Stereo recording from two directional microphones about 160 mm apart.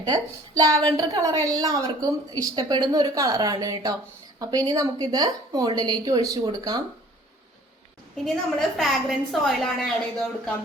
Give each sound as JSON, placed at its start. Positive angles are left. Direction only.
{"t": 0.0, "sound": "a woman's voice", "side_deg": -25}
{"t": 8.1, "sound": "a woman's voice", "side_deg": 5}